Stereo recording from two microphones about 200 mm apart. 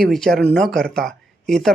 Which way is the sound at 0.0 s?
Centre (ahead or behind).